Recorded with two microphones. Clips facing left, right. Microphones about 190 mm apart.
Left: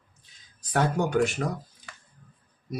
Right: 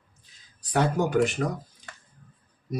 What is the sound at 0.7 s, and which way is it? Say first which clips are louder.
Speech: right 1 dB; centre (ahead or behind).